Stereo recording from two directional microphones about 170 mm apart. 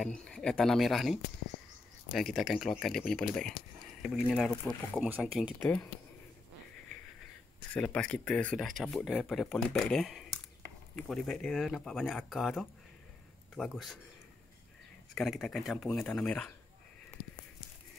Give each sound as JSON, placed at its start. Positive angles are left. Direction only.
{"t": 0.0, "sound": "speech", "side_deg": 5}
{"t": 5.6, "sound": "speech", "side_deg": 10}
{"t": 7.7, "sound": "speech", "side_deg": 5}
{"t": 15.1, "sound": "speech", "side_deg": 0}